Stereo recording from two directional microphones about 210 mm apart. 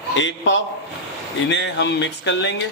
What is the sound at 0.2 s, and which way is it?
Speech, 60° left (ahead or behind).